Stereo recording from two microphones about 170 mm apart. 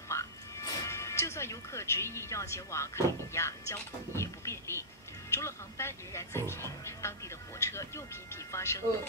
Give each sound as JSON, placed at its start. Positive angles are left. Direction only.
{"t": 0.1, "sound": "speech", "side_deg": 15}